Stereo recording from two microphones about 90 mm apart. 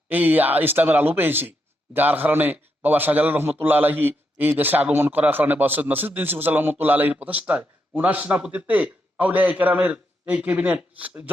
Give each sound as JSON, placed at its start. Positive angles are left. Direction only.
{"t": 0.1, "sound": "speech", "side_deg": -20}